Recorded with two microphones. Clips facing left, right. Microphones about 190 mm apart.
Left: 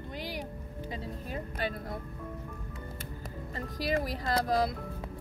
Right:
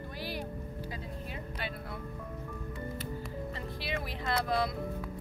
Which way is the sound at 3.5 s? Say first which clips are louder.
Left 10 dB; 40° left (ahead or behind).